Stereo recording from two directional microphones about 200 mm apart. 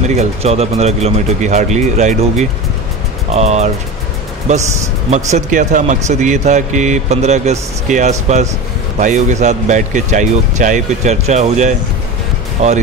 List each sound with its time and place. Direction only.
0.1 s speech: 30° right (ahead or behind)
5.1 s speech: 35° right (ahead or behind)